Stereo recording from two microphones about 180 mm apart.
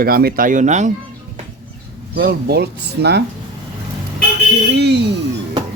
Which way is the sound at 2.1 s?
60° right (ahead or behind).